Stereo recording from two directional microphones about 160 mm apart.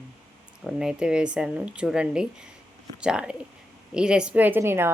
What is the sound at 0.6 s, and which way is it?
A woman's voice, 5° right (ahead or behind).